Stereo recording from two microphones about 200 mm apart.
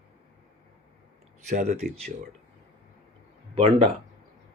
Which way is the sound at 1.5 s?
35° right (ahead or behind).